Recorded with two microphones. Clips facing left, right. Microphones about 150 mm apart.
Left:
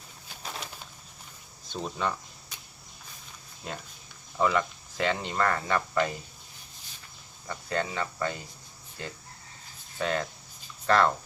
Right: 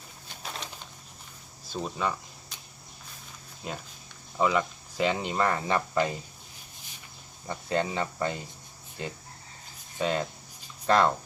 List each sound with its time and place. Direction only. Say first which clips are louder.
0.4 s a sound: even; 5° left (ahead or behind)
1.7 s speech: right 1 dB; 5° right (ahead or behind)
3.6 s speech: right 1 dB; 5° right (ahead or behind)
7.4 s speech: right 3 dB; 25° right (ahead or behind)
10.0 s speech: right 1 dB; 15° right (ahead or behind)